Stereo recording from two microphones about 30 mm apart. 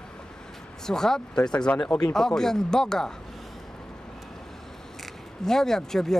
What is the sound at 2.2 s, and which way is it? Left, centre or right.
Speech, centre.